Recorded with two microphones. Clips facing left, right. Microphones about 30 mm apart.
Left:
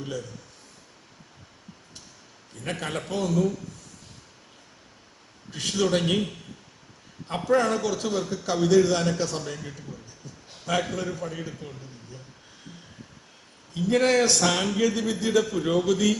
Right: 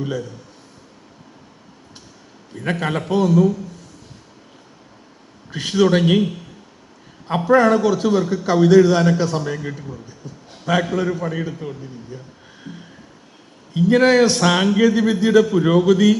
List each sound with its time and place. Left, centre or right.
0.0 s a man's voice: right
2.6 s a man's voice: right
5.5 s a man's voice: right
13.7 s a man's voice: right